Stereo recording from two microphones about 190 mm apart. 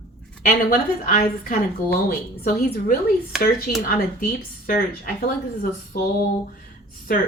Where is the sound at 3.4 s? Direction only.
50° left (ahead or behind).